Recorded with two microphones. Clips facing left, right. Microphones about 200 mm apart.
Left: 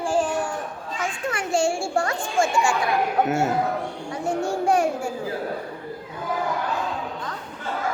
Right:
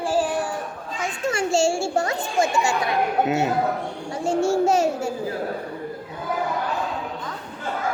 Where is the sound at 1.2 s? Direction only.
25° right (ahead or behind).